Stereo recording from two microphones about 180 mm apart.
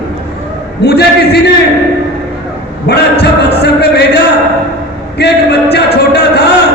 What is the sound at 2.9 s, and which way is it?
A man's voice, 65° left (ahead or behind).